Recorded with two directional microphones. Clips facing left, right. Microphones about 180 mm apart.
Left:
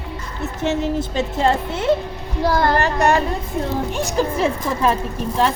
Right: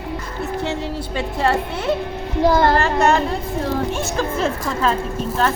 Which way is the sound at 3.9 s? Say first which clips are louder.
Left 2 dB; 15° left (ahead or behind).